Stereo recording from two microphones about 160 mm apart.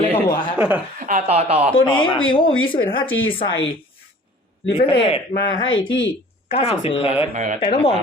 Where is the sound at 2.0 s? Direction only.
30° left (ahead or behind).